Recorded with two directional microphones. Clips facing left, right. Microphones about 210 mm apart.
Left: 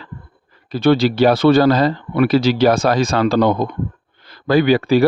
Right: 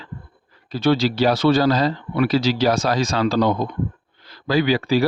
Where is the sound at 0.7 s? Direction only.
55° left (ahead or behind).